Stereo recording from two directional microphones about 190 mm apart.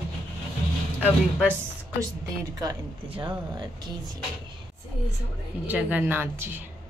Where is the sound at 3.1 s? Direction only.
25° right (ahead or behind).